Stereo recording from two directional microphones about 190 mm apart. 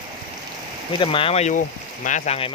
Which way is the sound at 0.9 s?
25° left (ahead or behind).